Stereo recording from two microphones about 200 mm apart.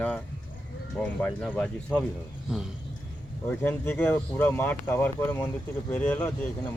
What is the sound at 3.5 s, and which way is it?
Speech, 10° left (ahead or behind).